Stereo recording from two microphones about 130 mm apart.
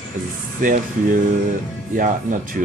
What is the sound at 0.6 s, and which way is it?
Speech, 90° right.